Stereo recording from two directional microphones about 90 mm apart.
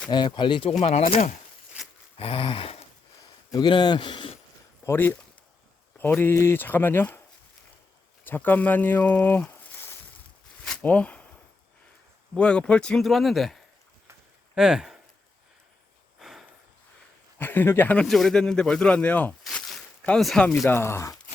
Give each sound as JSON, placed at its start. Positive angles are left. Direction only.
{"t": 0.1, "sound": "speech", "side_deg": 60}
{"t": 2.1, "sound": "a sound", "side_deg": 90}
{"t": 3.5, "sound": "speech", "side_deg": 55}
{"t": 4.9, "sound": "speech", "side_deg": 25}
{"t": 8.2, "sound": "speech", "side_deg": 20}
{"t": 12.4, "sound": "speech", "side_deg": 10}
{"t": 16.1, "sound": "a sound", "side_deg": -5}
{"t": 17.3, "sound": "speech", "side_deg": 25}
{"t": 18.0, "sound": "speech", "side_deg": 0}
{"t": 19.5, "sound": "a sound", "side_deg": 5}
{"t": 20.7, "sound": "speech", "side_deg": 30}